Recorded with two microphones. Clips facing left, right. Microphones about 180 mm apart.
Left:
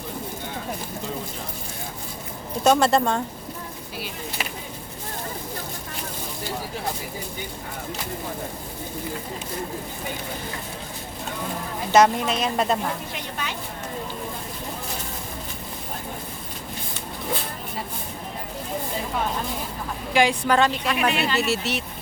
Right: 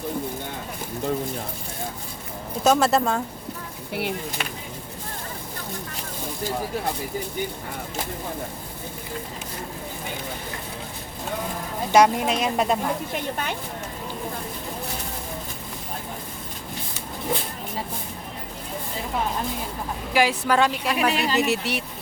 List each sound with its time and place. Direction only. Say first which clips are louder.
2.6 s a woman's voice: left 1 dB; 5° right (ahead or behind)
11.9 s speech: even; 10° right (ahead or behind)
13.1 s a woman's voice: right 4 dB; 50° right (ahead or behind)
20.1 s speech: left 1 dB; 5° right (ahead or behind)
20.9 s speech: even; 35° right (ahead or behind)
21.3 s speech: right 1 dB; 15° right (ahead or behind)